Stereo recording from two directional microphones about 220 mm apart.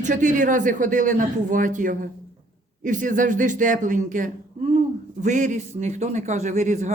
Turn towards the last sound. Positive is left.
turn(degrees=-35)  # may be behind; listen again after turning